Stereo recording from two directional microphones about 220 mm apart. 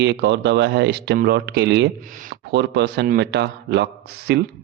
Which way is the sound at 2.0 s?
35° right (ahead or behind).